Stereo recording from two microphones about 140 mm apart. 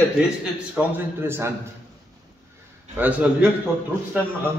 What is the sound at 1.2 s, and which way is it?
Speech, 15° right (ahead or behind).